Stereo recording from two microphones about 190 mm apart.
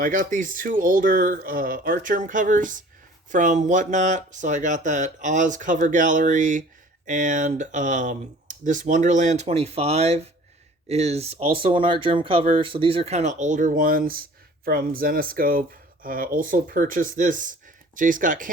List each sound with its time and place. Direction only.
0.0 s speech: 45° right (ahead or behind)